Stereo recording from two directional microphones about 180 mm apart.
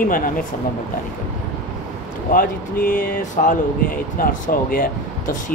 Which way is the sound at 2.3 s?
50° left (ahead or behind).